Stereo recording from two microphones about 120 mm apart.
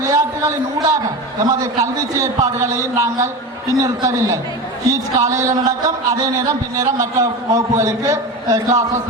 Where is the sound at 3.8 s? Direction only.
30° right (ahead or behind).